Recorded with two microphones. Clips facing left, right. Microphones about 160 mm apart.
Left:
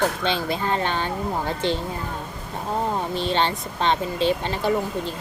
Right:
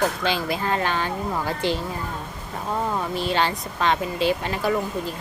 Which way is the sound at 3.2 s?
25° left (ahead or behind).